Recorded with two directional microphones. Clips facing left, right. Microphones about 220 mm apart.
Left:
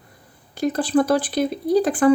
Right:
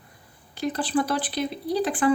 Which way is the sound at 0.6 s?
45° left (ahead or behind).